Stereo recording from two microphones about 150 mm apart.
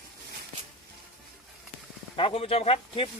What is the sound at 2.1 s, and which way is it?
Speech, 40° left (ahead or behind).